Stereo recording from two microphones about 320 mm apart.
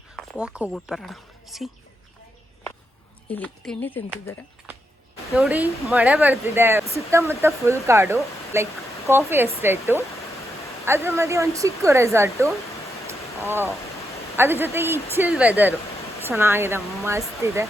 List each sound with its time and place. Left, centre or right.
0.2 s speech: centre
3.2 s speech: centre
14.3 s speech: centre